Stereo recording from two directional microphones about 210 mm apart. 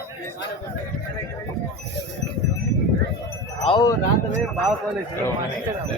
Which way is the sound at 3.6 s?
20° left (ahead or behind).